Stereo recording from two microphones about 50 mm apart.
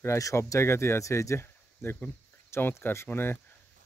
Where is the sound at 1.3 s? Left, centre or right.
Left.